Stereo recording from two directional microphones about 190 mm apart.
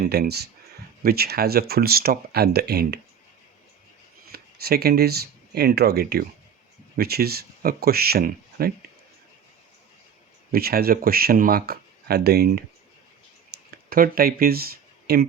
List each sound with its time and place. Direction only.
0.0 s speech: 55° right (ahead or behind)
4.3 s speech: 55° right (ahead or behind)
10.5 s speech: 55° right (ahead or behind)
13.5 s a sound: 50° right (ahead or behind)